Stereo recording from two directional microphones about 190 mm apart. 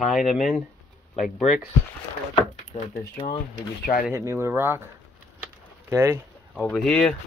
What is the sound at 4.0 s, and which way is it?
Speech, 15° right (ahead or behind).